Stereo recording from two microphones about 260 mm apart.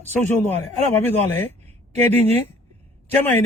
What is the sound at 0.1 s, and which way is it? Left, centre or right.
Speech, centre.